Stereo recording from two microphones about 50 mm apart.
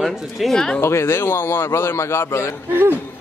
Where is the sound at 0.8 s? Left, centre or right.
Left.